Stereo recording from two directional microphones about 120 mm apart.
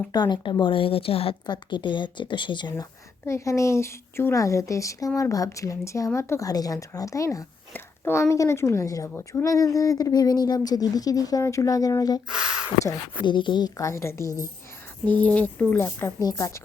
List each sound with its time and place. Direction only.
0.1 s a woman's voice: 35° left (ahead or behind); by 1.4 s 50° left (ahead or behind)
1.5 s a woman's voice: 40° left (ahead or behind)
3.2 s a woman's voice: 25° left (ahead or behind)
12.3 s speech: 5° right (ahead or behind)
13.2 s a woman's voice: 40° left (ahead or behind); by 14.3 s 20° left (ahead or behind)
14.3 s a woman's voice: 25° right (ahead or behind)
15.0 s a woman's voice: 10° left (ahead or behind)
16.2 s a woman's voice: 30° left (ahead or behind)